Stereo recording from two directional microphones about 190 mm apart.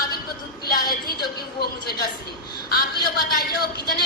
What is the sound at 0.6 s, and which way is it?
Music, 55° left (ahead or behind).